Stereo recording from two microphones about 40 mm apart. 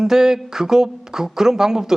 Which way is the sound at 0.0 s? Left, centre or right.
Centre.